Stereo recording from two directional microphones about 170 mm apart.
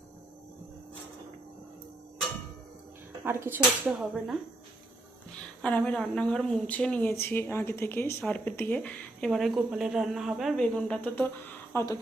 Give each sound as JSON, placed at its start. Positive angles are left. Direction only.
{"t": 3.2, "sound": "speech", "side_deg": -15}
{"t": 5.6, "sound": "speech", "side_deg": 10}